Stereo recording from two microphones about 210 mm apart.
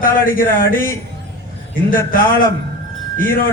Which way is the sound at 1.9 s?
40° left (ahead or behind).